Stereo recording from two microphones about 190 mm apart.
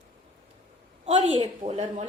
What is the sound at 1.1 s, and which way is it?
Speech, 30° right (ahead or behind).